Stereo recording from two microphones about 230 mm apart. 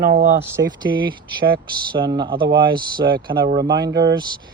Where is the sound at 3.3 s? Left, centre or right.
Right.